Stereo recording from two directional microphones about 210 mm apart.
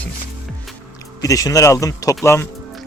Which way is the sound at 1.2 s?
15° left (ahead or behind).